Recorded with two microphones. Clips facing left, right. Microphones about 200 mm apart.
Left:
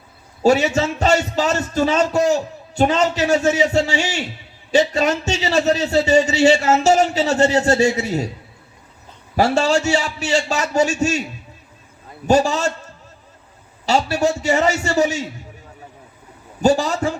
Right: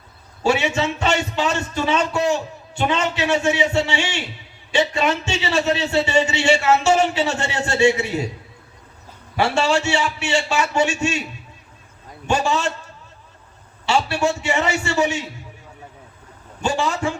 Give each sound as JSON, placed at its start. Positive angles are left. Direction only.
{"t": 0.4, "sound": "speech", "side_deg": 40}
{"t": 9.3, "sound": "speech", "side_deg": 40}
{"t": 12.2, "sound": "speech", "side_deg": 40}
{"t": 13.8, "sound": "speech", "side_deg": 40}
{"t": 16.6, "sound": "speech", "side_deg": 40}